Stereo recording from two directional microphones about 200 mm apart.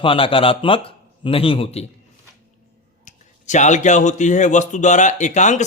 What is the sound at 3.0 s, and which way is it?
Speech, 40° left (ahead or behind).